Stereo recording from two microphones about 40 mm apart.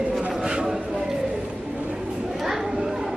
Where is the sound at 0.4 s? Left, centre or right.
Centre.